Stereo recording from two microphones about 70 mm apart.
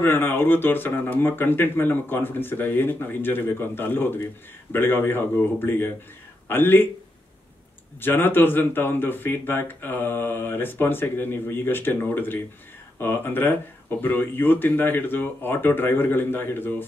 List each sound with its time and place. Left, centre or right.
0.0 s speech: left
8.0 s speech: left